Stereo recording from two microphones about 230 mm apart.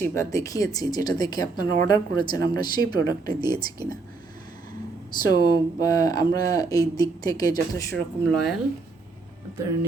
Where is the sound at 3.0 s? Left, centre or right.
Right.